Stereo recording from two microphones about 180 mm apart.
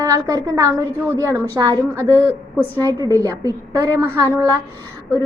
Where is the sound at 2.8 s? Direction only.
20° right (ahead or behind).